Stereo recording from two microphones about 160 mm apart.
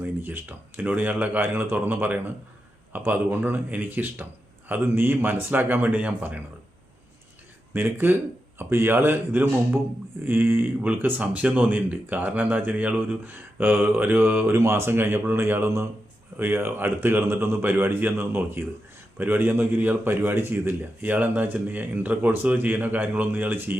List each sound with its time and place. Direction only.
0.0 s speech: 10° right (ahead or behind)
7.7 s speech: 15° right (ahead or behind)